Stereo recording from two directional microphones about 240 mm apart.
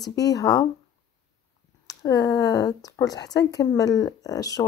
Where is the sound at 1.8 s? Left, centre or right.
Centre.